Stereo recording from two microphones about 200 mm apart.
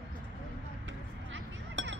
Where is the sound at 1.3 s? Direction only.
65° right (ahead or behind).